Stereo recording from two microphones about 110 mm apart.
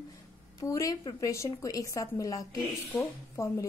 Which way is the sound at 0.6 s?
30° left (ahead or behind).